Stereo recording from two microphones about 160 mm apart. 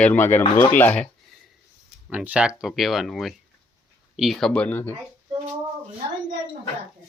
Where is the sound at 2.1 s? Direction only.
5° right (ahead or behind); by 4.9 s 10° left (ahead or behind).